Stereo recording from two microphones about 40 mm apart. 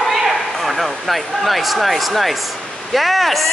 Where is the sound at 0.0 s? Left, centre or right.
Centre.